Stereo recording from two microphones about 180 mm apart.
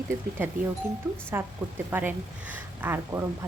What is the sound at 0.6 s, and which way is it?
Speech, 45° right (ahead or behind).